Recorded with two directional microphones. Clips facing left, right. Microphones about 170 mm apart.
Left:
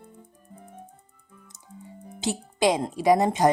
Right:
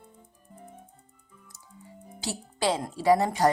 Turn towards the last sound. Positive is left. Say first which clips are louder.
# left 2 dB
turn(degrees=20)  # may be behind; listen again after turning